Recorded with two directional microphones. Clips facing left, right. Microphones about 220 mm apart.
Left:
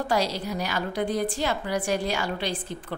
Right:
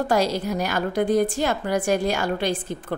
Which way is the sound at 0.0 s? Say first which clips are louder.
Right 4 dB; 45° right (ahead or behind).